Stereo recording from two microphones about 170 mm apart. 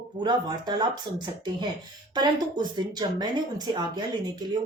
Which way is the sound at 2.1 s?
25° right (ahead or behind).